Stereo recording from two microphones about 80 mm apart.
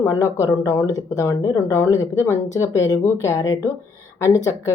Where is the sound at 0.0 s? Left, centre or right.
Left.